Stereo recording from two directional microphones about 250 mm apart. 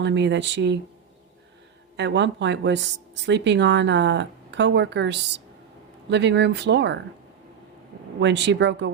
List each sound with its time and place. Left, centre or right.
0.0 s speech: right
2.0 s speech: right
8.2 s speech: right